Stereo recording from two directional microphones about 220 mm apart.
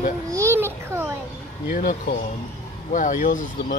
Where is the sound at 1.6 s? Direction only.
40° left (ahead or behind).